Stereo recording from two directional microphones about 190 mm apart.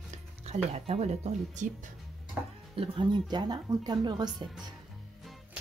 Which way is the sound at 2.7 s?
25° right (ahead or behind).